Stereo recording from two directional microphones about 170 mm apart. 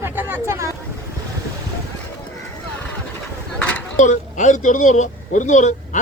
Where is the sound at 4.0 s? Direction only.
45° left (ahead or behind).